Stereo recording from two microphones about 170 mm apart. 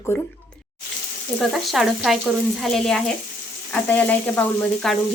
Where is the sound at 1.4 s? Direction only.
Centre (ahead or behind).